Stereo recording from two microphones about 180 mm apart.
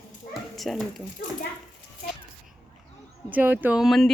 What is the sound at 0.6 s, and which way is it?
Speech, centre (ahead or behind).